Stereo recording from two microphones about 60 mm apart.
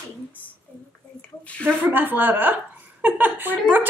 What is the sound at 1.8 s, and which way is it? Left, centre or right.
A woman's voice, right.